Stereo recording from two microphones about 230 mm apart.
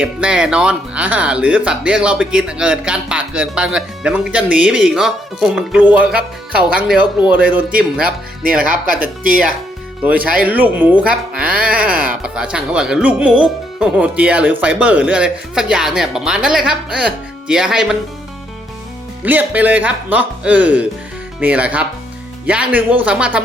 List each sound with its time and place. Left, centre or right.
0.0 s speech: centre
9.2 s speech: right
10.0 s speech: centre
19.2 s speech: centre